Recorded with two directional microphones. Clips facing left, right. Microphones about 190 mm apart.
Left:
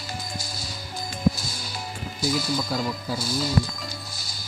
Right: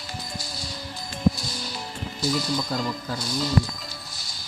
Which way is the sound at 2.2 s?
5° left (ahead or behind).